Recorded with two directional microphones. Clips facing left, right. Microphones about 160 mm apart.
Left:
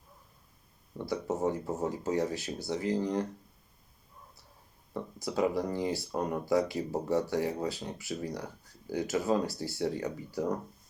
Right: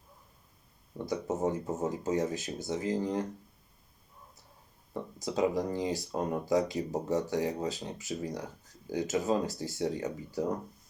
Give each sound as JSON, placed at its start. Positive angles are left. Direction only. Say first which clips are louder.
{"t": 1.0, "sound": "speech", "louder": "even", "side_deg": -20}
{"t": 5.2, "sound": "speech", "louder": "even", "side_deg": -15}